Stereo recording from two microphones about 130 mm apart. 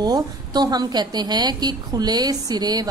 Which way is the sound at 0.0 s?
30° right (ahead or behind).